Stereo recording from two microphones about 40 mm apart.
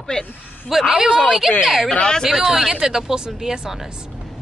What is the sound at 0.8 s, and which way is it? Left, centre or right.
Speech, right.